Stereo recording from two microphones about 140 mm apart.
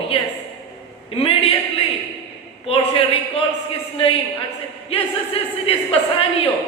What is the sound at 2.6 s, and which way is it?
A woman's voice, 40° left (ahead or behind).